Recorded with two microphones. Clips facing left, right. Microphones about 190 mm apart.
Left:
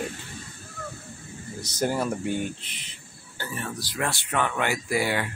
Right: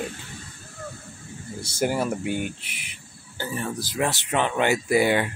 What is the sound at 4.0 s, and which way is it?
Speech, 20° right (ahead or behind).